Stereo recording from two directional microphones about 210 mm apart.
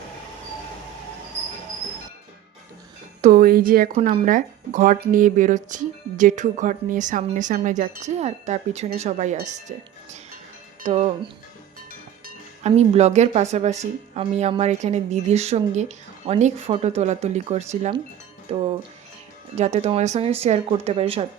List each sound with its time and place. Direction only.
3.2 s speech: 40° right (ahead or behind)
12.2 s speech: 30° right (ahead or behind)
19.5 s speech: 30° right (ahead or behind)